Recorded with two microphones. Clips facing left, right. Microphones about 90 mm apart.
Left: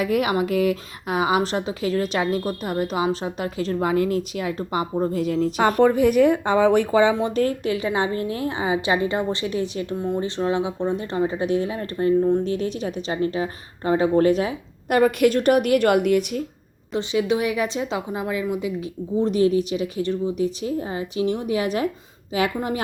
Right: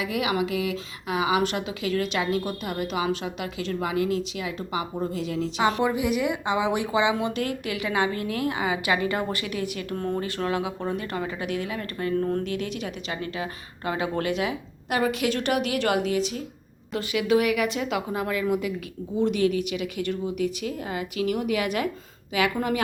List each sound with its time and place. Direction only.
0.0 s a woman's voice: 45° left (ahead or behind); by 9.8 s 30° left (ahead or behind)
9.9 s speech: 15° left (ahead or behind)
12.4 s a woman's voice: 35° left (ahead or behind); by 16.4 s 55° left (ahead or behind)
16.9 s speech: 25° left (ahead or behind)
19.2 s a woman's voice: 35° left (ahead or behind)